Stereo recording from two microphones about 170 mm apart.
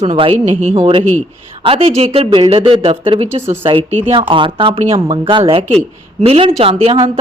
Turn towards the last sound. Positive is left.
turn(degrees=-30)  # may be behind; listen again after turning